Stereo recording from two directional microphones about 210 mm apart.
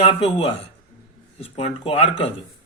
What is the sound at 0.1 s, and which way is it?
Speech, 25° left (ahead or behind).